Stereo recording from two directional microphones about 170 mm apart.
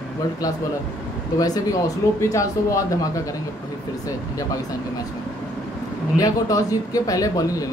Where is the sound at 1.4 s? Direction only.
20° left (ahead or behind).